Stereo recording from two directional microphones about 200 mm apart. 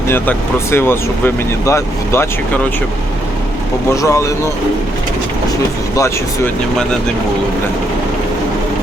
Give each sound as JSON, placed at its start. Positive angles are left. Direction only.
{"t": 0.1, "sound": "speech", "side_deg": 10}
{"t": 3.9, "sound": "speech", "side_deg": 15}
{"t": 6.0, "sound": "speech", "side_deg": 10}